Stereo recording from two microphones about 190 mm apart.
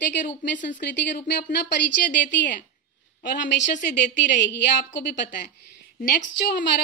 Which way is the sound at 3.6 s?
40° left (ahead or behind).